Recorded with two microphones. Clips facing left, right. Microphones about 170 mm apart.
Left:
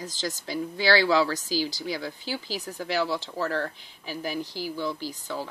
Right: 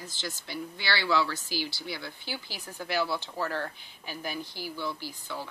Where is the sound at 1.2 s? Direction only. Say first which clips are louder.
Left 6 dB; 40° left (ahead or behind).